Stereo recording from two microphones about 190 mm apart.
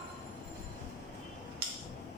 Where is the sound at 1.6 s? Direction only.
55° right (ahead or behind).